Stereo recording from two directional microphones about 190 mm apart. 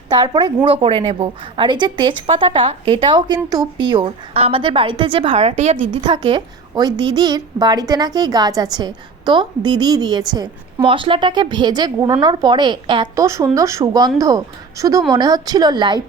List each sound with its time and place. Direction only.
0.1 s a woman's voice: 25° right (ahead or behind)
5.9 s a woman's voice: 25° right (ahead or behind)